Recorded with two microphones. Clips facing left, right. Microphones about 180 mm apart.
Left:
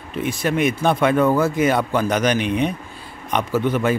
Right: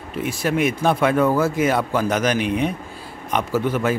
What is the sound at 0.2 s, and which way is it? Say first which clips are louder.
Speech: left 1 dB; 5° right (ahead or behind).